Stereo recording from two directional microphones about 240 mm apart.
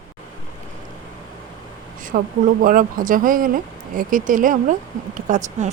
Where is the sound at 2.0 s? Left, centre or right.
Right.